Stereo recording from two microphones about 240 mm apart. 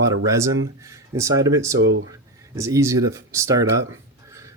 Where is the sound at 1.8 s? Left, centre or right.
Right.